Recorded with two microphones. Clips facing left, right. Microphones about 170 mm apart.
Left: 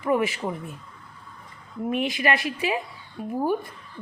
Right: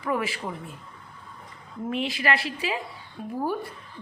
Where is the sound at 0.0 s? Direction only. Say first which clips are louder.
Left 5 dB; 20° left (ahead or behind).